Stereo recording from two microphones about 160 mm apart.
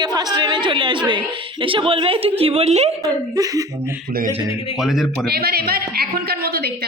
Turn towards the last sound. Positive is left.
turn(degrees=-75)  # may be behind; listen again after turning